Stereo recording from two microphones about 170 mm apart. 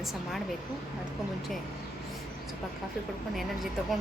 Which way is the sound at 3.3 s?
Centre (ahead or behind).